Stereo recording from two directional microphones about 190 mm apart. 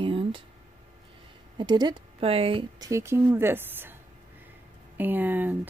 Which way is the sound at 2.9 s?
15° right (ahead or behind).